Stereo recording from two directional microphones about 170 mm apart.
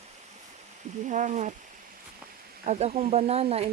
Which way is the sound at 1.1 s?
45° right (ahead or behind).